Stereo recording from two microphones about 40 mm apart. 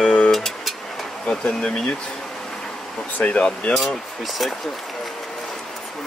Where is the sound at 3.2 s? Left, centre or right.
Left.